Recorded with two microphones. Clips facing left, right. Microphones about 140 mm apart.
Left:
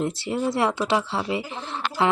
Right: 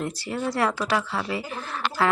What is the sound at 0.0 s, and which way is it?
Speech, 25° left (ahead or behind).